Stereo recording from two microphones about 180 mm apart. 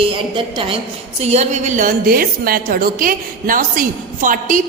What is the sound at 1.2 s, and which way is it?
A man's voice, 40° right (ahead or behind).